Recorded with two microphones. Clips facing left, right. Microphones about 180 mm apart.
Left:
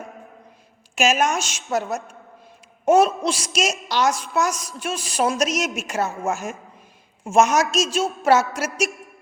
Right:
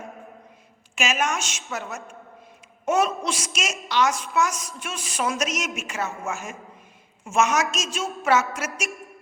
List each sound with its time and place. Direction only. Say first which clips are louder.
0.9 s a woman's voice: left 6 dB; 40° left (ahead or behind)